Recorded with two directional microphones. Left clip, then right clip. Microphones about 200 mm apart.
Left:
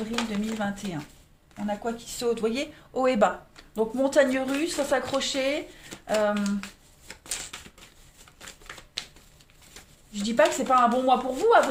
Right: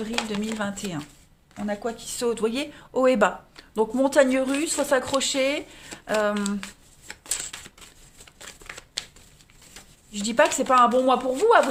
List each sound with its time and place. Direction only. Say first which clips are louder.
0.2 s a woman's voice: right 2 dB; 40° right (ahead or behind)
7.3 s a sound: right 3 dB; 35° right (ahead or behind)
9.0 s shuffling cards: right 2 dB; 35° right (ahead or behind)
10.1 s a woman's voice: right 1 dB; 40° right (ahead or behind)